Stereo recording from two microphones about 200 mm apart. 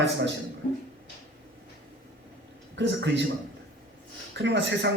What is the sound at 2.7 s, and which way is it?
Speech, 60° right (ahead or behind).